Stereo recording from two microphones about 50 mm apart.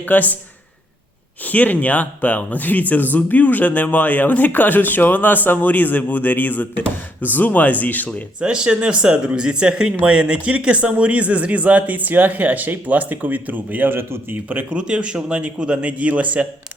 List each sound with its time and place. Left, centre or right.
0.0 s a man's voice: left
1.5 s a man's voice: left
8.4 s speech: centre; by 13.9 s right
13.9 s a man's voice: right
14.6 s speech: right